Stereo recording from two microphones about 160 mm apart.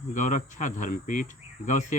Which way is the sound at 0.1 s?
50° left (ahead or behind).